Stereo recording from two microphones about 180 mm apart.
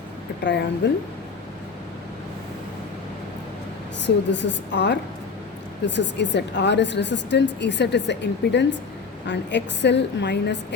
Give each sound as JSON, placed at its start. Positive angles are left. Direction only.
{"t": 0.8, "sound": "a woman's voice", "side_deg": 70}
{"t": 4.0, "sound": "a woman's voice", "side_deg": 75}